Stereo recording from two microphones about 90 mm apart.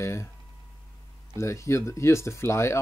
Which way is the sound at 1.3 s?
35° left (ahead or behind).